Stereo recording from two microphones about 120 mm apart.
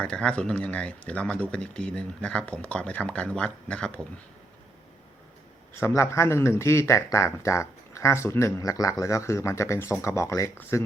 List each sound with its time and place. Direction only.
0.0 s speech: 10° left (ahead or behind)
5.8 s speech: 25° left (ahead or behind)